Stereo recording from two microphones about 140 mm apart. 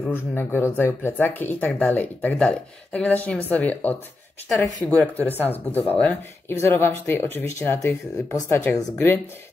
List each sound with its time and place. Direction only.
0.0 s speech: 15° left (ahead or behind)